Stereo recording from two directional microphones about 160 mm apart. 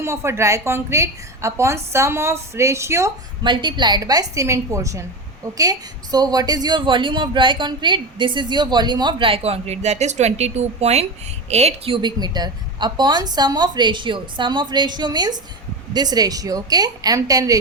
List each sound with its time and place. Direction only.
0.0 s a woman's voice: 15° right (ahead or behind)
3.4 s a woman's voice: 30° right (ahead or behind)